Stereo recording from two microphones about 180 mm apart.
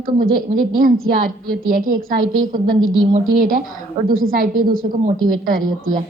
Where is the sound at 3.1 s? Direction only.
50° right (ahead or behind).